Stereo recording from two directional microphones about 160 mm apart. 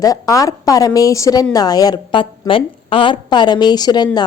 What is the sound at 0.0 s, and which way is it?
A woman's voice, 20° left (ahead or behind).